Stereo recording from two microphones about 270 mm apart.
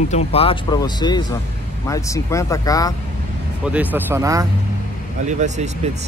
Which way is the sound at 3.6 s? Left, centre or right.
Centre.